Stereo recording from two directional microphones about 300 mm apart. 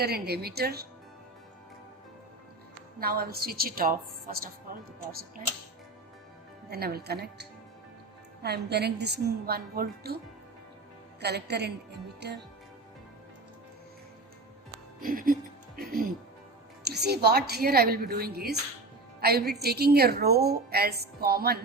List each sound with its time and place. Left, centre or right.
0.0 s a woman's voice: right
3.0 s a woman's voice: right
6.7 s a woman's voice: right
11.2 s a woman's voice: right
15.0 s a woman's voice: right